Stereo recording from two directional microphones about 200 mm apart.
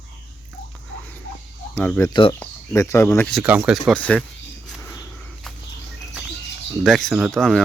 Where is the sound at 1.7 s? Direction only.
10° left (ahead or behind).